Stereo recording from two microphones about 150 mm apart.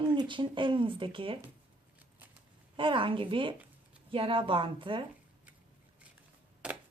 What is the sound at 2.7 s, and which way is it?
Speech, 35° right (ahead or behind).